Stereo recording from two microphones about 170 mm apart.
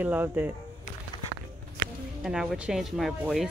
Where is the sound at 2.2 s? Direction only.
5° right (ahead or behind).